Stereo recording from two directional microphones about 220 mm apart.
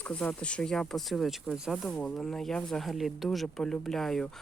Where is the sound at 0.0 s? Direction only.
5° left (ahead or behind).